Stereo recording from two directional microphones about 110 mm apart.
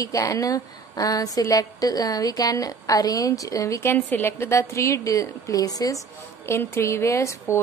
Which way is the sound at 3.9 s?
20° left (ahead or behind).